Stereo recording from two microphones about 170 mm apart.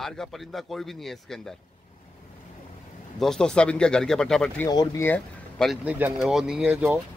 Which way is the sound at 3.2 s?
5° left (ahead or behind).